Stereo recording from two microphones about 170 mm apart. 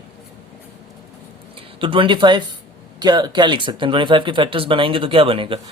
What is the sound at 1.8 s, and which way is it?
Speech, 30° right (ahead or behind).